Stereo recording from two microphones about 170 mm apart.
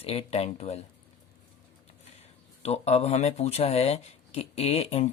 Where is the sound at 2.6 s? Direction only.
40° left (ahead or behind).